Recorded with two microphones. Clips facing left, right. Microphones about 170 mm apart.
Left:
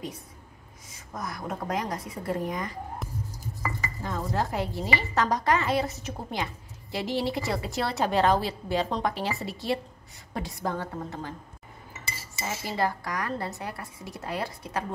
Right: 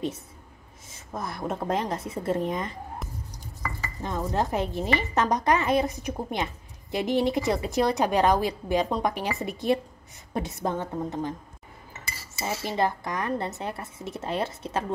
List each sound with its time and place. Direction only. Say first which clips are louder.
0.8 s a woman's voice: right 2 dB; 25° right (ahead or behind)
3.0 s music: left 1 dB; centre (ahead or behind)
4.0 s a woman's voice: right 2 dB; 20° right (ahead or behind)
12.6 s a woman's voice: right 2 dB; 20° right (ahead or behind)